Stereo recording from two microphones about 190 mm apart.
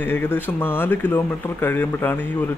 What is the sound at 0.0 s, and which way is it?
Speech, 10° left (ahead or behind).